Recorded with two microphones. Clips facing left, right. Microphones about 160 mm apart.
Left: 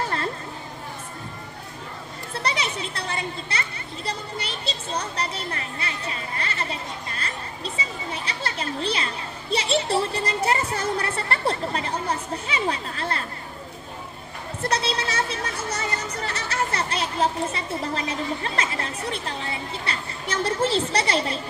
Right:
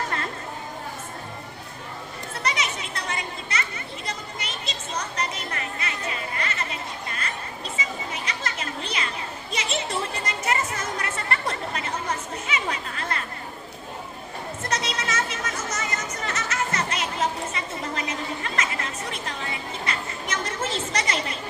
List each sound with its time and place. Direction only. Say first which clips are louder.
2.3 s children playing: left 2 dB; 30° left (ahead or behind)
9.5 s speech: left 7 dB; 30° left (ahead or behind)
14.6 s speech: left 5 dB; 30° left (ahead or behind)